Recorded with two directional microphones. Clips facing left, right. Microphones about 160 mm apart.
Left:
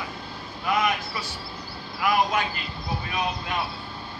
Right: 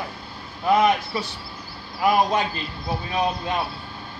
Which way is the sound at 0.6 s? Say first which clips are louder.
Right 6 dB; 30° right (ahead or behind).